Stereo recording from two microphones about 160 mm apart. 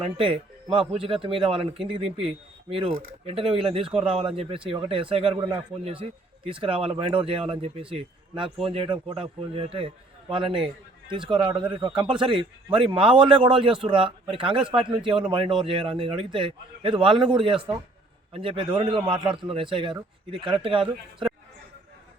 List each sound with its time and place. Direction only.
0.0 s a man's voice: 30° right (ahead or behind)